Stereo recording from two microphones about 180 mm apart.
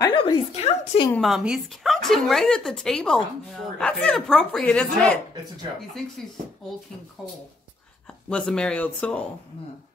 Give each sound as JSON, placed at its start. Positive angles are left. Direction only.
{"t": 0.1, "sound": "a woman's voice", "side_deg": 30}
{"t": 1.1, "sound": "speech", "side_deg": 0}
{"t": 7.2, "sound": "speech", "side_deg": 0}